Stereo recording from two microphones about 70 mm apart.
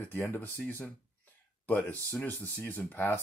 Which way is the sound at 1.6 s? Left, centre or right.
Left.